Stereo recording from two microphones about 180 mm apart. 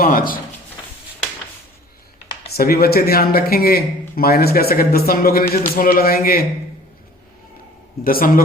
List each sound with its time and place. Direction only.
0.0 s speech: 50° left (ahead or behind)
2.5 s speech: 55° left (ahead or behind)
8.0 s speech: 50° left (ahead or behind)